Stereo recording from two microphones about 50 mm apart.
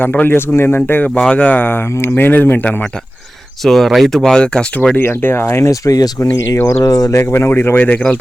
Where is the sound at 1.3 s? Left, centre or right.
Left.